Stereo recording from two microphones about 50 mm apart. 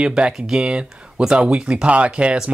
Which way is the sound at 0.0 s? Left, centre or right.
Centre.